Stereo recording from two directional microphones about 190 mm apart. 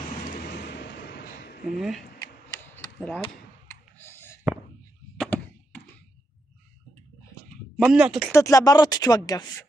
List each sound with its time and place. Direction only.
0.5 s a sound: 60° left (ahead or behind)
1.8 s speech: centre (ahead or behind)
2.6 s mechanisms: 10° left (ahead or behind)
4.0 s clicking: 10° left (ahead or behind)
5.2 s chop: 5° left (ahead or behind)
7.7 s speech: 5° right (ahead or behind)
8.3 s speech: 15° left (ahead or behind)